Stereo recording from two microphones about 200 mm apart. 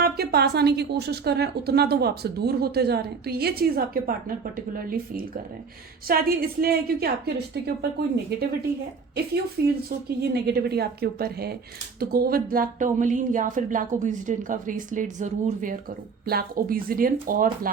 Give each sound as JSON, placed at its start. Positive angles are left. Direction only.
{"t": 0.0, "sound": "speech", "side_deg": -50}
{"t": 9.6, "sound": "speech", "side_deg": -55}